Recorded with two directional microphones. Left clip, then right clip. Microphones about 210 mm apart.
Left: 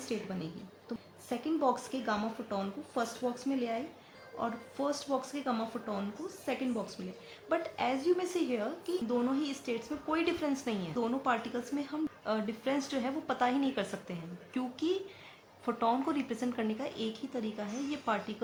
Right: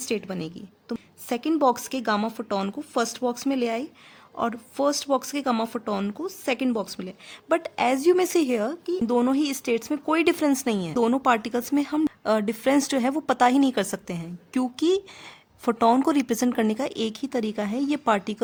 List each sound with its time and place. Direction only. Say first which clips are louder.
0.0 s a woman's voice: right 9 dB; 45° right (ahead or behind)